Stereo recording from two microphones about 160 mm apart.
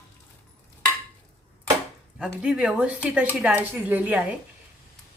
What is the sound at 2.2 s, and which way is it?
A woman's voice, 5° right (ahead or behind).